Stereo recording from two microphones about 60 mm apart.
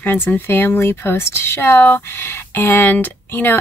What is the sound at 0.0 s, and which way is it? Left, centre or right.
Speech, left.